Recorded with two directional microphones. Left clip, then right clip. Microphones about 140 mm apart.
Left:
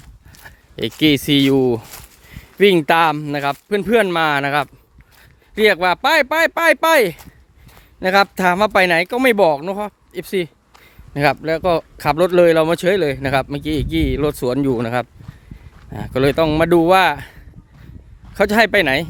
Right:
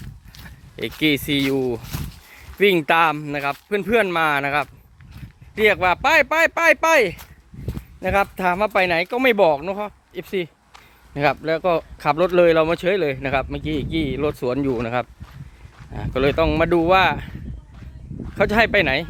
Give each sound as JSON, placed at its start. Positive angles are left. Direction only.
{"t": 0.4, "sound": "speech", "side_deg": 45}
{"t": 2.3, "sound": "a man's voice", "side_deg": 40}
{"t": 8.0, "sound": "a man's voice", "side_deg": 50}
{"t": 18.3, "sound": "speech", "side_deg": 40}